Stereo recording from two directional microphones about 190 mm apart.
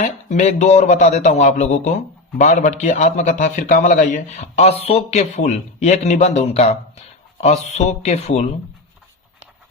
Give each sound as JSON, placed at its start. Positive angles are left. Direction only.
{"t": 0.0, "sound": "speech", "side_deg": 40}